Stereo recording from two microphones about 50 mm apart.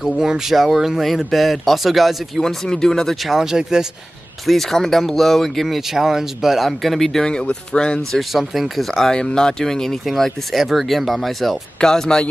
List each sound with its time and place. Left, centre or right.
0.0 s speech: centre
3.3 s speech: centre
4.5 s speech: centre
5.8 s speech: centre
8.1 s speech: centre
11.8 s speech: centre